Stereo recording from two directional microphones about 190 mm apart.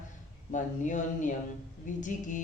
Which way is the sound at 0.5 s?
40° left (ahead or behind).